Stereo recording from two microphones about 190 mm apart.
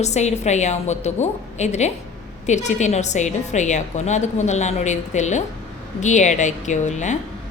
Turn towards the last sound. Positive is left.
turn(degrees=40)  # may be behind; listen again after turning